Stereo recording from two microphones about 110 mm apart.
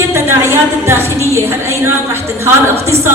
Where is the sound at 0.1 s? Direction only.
25° right (ahead or behind).